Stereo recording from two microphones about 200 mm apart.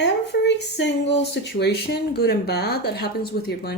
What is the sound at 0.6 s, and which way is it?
Speech, 60° left (ahead or behind).